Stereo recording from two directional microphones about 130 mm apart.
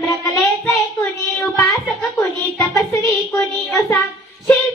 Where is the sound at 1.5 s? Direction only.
25° left (ahead or behind).